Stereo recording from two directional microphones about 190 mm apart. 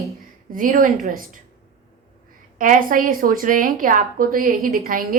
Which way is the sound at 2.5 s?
45° right (ahead or behind).